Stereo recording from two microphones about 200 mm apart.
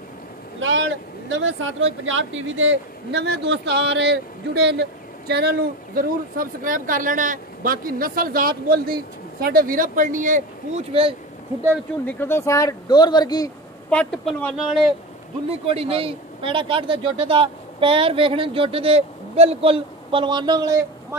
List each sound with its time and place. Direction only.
0.6 s speech: 75° right (ahead or behind); by 11.1 s 30° right (ahead or behind)
12.1 s speech: 10° left (ahead or behind)
13.8 s a man's voice: 5° left (ahead or behind)
15.6 s speech: 30° right (ahead or behind)